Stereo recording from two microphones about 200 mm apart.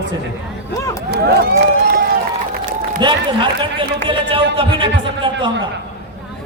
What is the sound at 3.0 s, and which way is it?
A man's voice, 25° right (ahead or behind).